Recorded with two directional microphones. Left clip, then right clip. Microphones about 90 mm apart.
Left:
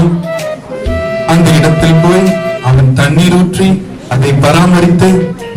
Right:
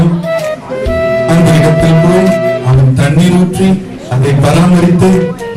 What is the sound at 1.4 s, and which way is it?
Music, 15° left (ahead or behind).